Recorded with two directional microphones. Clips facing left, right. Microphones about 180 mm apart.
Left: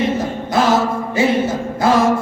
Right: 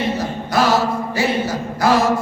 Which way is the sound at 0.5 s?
25° left (ahead or behind).